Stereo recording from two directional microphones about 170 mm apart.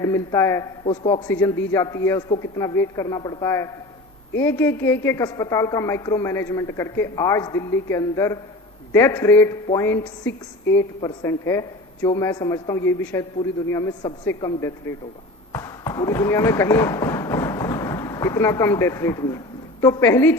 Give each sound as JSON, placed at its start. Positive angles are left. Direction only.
{"t": 0.0, "sound": "a woman's voice", "side_deg": 15}
{"t": 1.3, "sound": "a woman's voice", "side_deg": 15}